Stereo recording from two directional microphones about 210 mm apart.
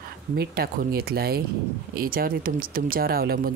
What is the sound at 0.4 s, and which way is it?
Speech, 45° right (ahead or behind).